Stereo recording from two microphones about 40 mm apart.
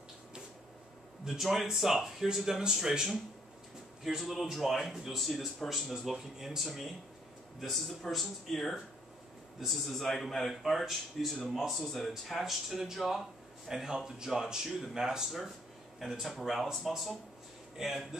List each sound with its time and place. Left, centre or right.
1.2 s speech: centre
4.2 s speech: centre
6.1 s speech: centre
7.6 s speech: centre
15.2 s speech: centre